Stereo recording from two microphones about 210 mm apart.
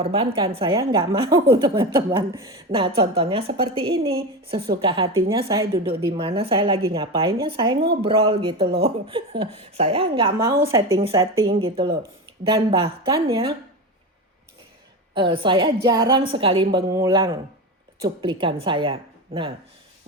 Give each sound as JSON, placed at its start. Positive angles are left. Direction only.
{"t": 0.0, "sound": "a woman's voice", "side_deg": -25}
{"t": 15.1, "sound": "a woman's voice", "side_deg": -25}